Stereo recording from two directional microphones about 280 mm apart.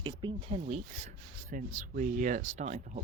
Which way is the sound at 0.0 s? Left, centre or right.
Centre.